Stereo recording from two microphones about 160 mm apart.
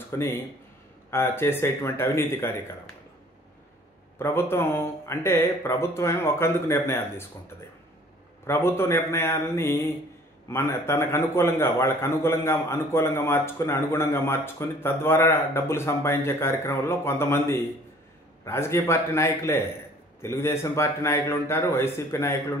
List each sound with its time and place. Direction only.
0.1 s a man's voice: 15° left (ahead or behind)
4.2 s a man's voice: 15° left (ahead or behind)